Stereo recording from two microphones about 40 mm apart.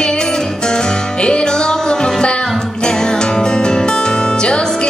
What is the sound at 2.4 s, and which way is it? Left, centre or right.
Music, centre.